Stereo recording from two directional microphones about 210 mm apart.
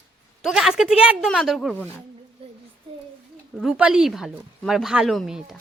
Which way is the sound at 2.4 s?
25° right (ahead or behind).